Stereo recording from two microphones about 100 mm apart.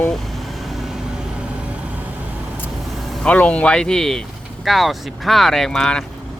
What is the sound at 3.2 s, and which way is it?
Speech, 10° left (ahead or behind).